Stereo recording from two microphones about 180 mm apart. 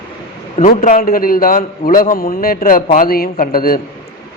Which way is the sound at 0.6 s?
45° left (ahead or behind).